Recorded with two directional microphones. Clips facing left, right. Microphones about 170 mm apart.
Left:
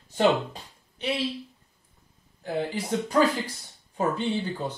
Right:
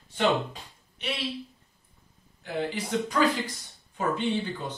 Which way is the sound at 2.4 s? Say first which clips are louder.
Left 2 dB; 40° left (ahead or behind).